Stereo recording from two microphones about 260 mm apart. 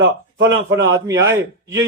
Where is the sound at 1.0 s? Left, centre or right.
Centre.